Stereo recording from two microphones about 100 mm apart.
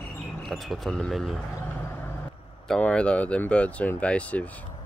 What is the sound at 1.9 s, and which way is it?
Vehicle, 20° left (ahead or behind).